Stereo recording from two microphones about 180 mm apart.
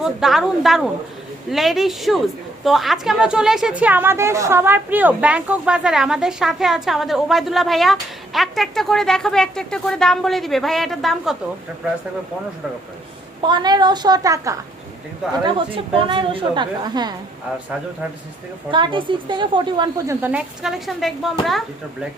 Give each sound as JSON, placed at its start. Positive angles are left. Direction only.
{"t": 0.0, "sound": "a woman's voice", "side_deg": 0}
{"t": 13.4, "sound": "a woman's voice", "side_deg": -25}
{"t": 15.4, "sound": "a woman's voice", "side_deg": -30}
{"t": 18.7, "sound": "a woman's voice", "side_deg": -25}
{"t": 20.2, "sound": "a woman's voice", "side_deg": -5}